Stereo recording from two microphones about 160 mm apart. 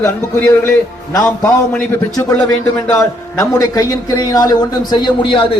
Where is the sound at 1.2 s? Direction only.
10° left (ahead or behind).